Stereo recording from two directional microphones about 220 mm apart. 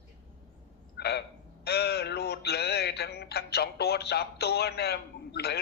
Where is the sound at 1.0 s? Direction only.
50° left (ahead or behind).